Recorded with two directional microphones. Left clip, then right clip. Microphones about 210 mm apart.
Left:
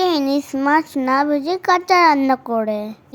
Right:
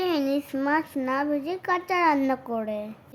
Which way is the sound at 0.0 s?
20° left (ahead or behind).